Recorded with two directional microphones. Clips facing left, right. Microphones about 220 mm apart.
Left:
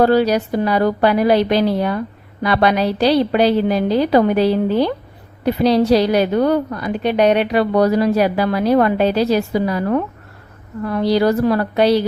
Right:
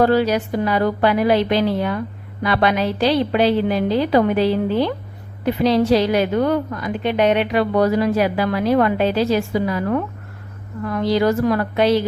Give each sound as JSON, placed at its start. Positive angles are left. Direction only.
{"t": 0.0, "sound": "a woman's voice", "side_deg": 40}